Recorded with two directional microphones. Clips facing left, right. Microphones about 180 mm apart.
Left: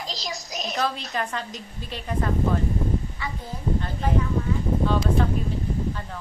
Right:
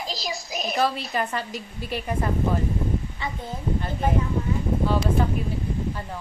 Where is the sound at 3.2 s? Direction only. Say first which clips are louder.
Right 2 dB; 25° right (ahead or behind).